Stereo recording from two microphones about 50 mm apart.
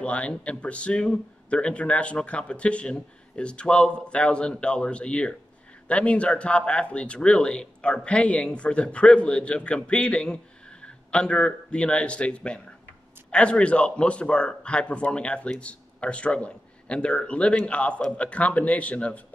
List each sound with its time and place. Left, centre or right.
0.0 s speech: left